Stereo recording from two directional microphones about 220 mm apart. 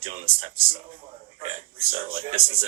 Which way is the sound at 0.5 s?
40° right (ahead or behind).